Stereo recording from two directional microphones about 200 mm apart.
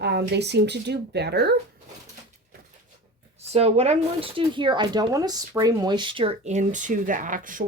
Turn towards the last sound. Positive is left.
turn(degrees=-40)  # may be behind; listen again after turning